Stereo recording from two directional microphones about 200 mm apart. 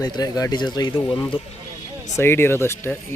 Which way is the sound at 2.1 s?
10° left (ahead or behind).